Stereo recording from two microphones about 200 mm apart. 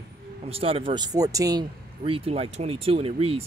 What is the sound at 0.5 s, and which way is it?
Speech, 30° right (ahead or behind).